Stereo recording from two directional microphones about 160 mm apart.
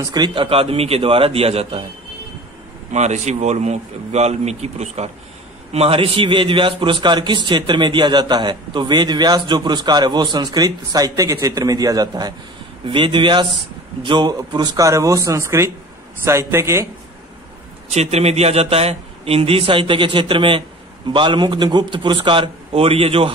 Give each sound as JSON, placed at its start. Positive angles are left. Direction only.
{"t": 0.0, "sound": "a man's voice", "side_deg": -25}
{"t": 2.9, "sound": "a man's voice", "side_deg": -45}
{"t": 17.8, "sound": "a man's voice", "side_deg": -40}